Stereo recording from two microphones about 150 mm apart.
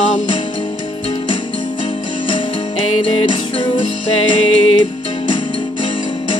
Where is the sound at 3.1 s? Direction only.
30° left (ahead or behind).